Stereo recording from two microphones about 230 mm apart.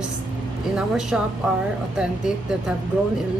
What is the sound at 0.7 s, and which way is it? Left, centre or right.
Speech, centre.